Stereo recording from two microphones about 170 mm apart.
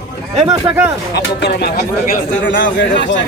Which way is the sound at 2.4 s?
90° left.